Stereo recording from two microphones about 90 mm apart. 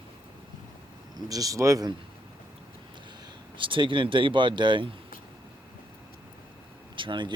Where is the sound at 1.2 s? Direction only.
40° right (ahead or behind).